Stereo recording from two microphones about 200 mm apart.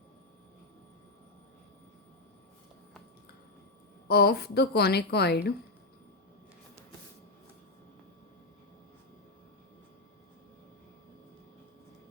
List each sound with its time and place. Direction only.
4.1 s a woman's voice: 55° left (ahead or behind)